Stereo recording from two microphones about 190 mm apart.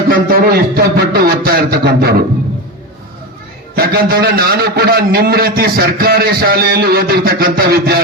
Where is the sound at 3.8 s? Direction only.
50° right (ahead or behind).